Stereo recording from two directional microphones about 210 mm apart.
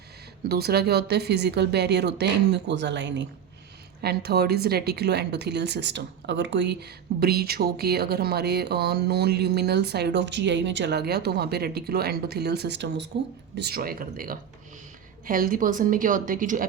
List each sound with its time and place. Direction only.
0.4 s a woman's voice: 50° right (ahead or behind)